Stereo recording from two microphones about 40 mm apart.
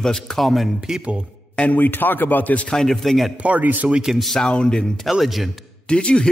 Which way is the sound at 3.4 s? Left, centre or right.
Right.